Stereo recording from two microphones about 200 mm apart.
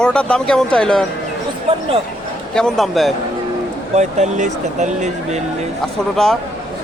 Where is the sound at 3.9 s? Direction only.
35° right (ahead or behind).